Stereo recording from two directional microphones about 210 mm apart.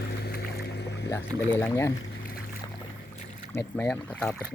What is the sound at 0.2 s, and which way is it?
Boat, 50° left (ahead or behind).